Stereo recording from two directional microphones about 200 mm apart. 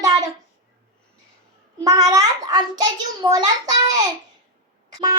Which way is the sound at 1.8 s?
15° right (ahead or behind).